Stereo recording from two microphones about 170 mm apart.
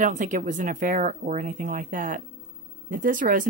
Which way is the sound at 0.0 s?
50° right (ahead or behind).